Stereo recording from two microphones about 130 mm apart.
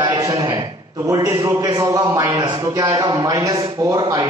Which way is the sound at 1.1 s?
25° right (ahead or behind).